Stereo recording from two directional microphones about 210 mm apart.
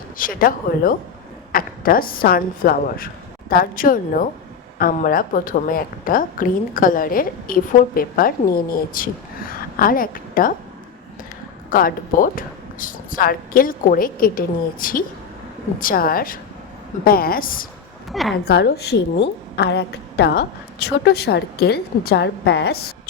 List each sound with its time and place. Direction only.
0.2 s a woman's voice: 40° left (ahead or behind)
11.7 s a woman's voice: 40° left (ahead or behind)
18.1 s a woman's voice: centre (ahead or behind)
18.4 s a woman's voice: 50° left (ahead or behind)